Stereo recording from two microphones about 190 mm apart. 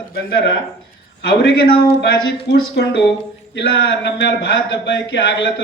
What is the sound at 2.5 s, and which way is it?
Speech, 65° left (ahead or behind).